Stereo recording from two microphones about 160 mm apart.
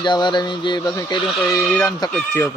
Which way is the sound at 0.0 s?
30° left (ahead or behind).